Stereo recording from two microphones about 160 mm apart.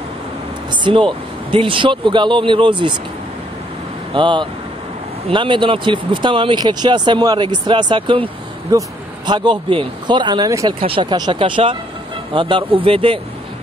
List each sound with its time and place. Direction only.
0.7 s speech: 30° right (ahead or behind)
4.1 s speech: 30° right (ahead or behind)
10.8 s speech: 35° right (ahead or behind)